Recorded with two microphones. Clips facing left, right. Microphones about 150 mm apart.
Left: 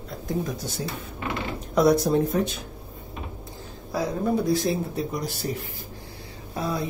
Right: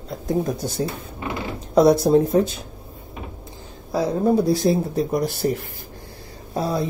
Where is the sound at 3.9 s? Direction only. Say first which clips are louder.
Right 6 dB; 30° right (ahead or behind).